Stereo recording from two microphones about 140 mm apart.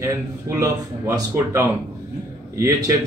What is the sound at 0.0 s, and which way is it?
Speech, 20° right (ahead or behind).